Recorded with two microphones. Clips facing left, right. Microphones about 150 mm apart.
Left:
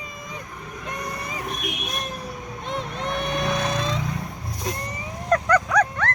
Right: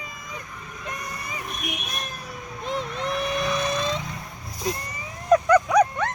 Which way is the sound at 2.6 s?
Centre (ahead or behind).